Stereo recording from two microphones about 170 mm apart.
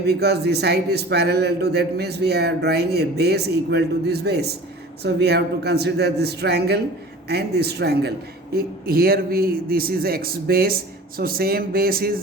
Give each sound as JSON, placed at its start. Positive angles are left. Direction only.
{"t": 0.0, "sound": "a man's voice", "side_deg": -75}
{"t": 8.5, "sound": "a man's voice", "side_deg": -60}